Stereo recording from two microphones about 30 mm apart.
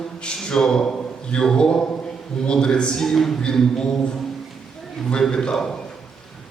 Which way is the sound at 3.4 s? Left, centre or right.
Left.